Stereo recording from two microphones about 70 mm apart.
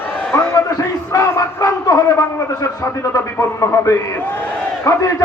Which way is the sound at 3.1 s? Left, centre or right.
Left.